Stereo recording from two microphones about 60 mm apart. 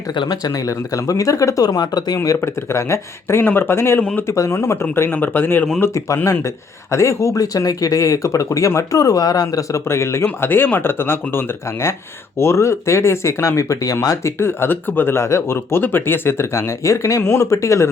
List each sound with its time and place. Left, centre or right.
0.3 s speech: left
2.6 s speech: left
3.4 s speech: left
4.4 s speech: left
6.9 s speech: left
9.7 s speech: left
10.2 s speech: left
14.3 s speech: left
16.5 s speech: left